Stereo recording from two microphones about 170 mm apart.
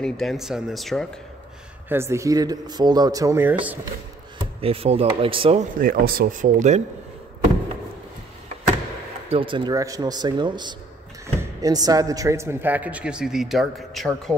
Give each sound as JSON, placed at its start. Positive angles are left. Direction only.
{"t": 0.0, "sound": "speech", "side_deg": 0}
{"t": 1.9, "sound": "speech", "side_deg": -15}
{"t": 4.6, "sound": "speech", "side_deg": -35}
{"t": 5.8, "sound": "speech", "side_deg": -60}
{"t": 9.3, "sound": "a man's voice", "side_deg": -30}